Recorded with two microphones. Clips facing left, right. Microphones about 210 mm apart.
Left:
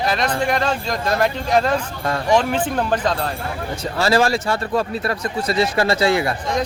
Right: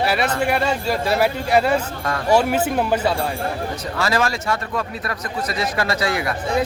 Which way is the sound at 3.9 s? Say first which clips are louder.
Left 5 dB; 30° left (ahead or behind).